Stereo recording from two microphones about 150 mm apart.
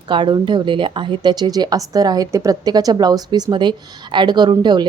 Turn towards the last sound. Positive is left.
turn(degrees=-30)  # may be behind; listen again after turning